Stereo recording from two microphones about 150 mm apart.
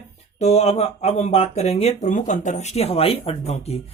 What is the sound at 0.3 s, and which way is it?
Speech, 45° left (ahead or behind).